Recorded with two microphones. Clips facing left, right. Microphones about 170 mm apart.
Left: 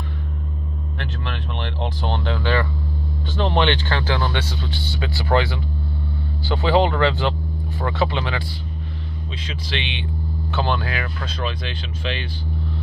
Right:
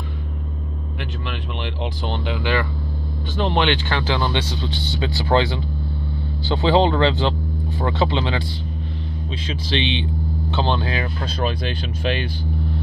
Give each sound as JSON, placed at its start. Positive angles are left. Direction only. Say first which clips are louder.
{"t": 2.2, "sound": "speech", "louder": "even", "side_deg": -15}
{"t": 9.5, "sound": "speech", "louder": "right 7 dB", "side_deg": -30}